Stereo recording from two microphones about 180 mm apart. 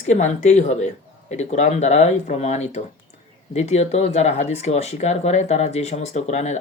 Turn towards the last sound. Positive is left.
turn(degrees=40)  # may be behind; listen again after turning